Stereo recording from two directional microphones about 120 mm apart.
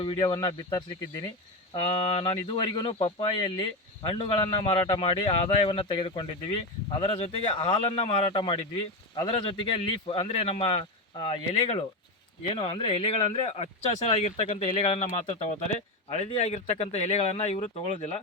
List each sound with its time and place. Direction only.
0.0 s speech: 45° left (ahead or behind)
2.0 s a man's voice: 55° left (ahead or behind)
2.5 s speech: 40° left (ahead or behind)
4.9 s speech: 40° left (ahead or behind); by 8.4 s 60° left (ahead or behind)
9.1 s speech: 45° left (ahead or behind)
11.2 s speech: 40° left (ahead or behind)
12.5 s a man's voice: 55° left (ahead or behind)